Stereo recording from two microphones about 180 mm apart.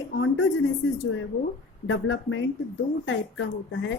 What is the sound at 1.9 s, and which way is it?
A woman's voice, 90° left.